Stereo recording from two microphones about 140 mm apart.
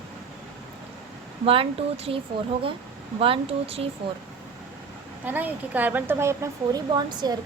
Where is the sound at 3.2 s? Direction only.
40° right (ahead or behind).